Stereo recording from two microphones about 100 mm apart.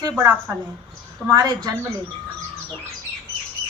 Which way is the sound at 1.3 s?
45° right (ahead or behind).